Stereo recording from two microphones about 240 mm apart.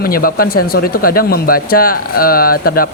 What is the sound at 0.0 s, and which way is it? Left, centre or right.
Speech, left.